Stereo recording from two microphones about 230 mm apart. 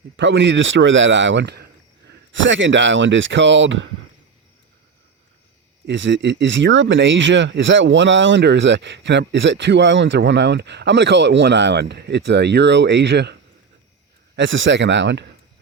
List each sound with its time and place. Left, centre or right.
0.2 s speech: right
5.8 s speech: right
14.3 s speech: right